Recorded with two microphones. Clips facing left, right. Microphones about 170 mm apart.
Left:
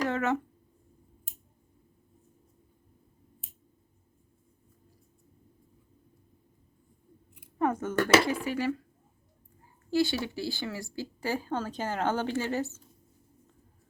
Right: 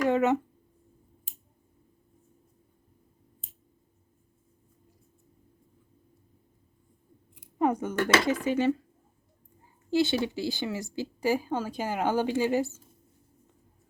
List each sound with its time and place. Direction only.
0.1 s a sound: 15° right (ahead or behind)
7.6 s speech: 15° right (ahead or behind)
9.9 s speech: 20° right (ahead or behind)